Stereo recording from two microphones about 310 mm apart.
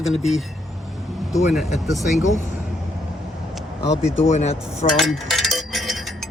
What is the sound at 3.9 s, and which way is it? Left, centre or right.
Speech, left.